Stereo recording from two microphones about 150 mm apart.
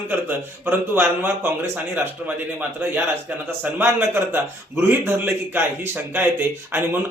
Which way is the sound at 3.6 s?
15° right (ahead or behind).